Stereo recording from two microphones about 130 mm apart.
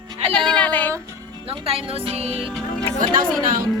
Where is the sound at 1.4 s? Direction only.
50° right (ahead or behind).